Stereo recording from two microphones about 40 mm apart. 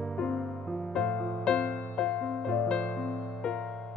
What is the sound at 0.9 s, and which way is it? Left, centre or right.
Music, left.